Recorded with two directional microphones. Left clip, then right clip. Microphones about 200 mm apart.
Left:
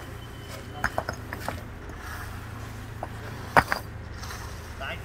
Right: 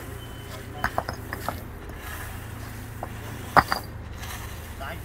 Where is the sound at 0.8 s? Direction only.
10° left (ahead or behind).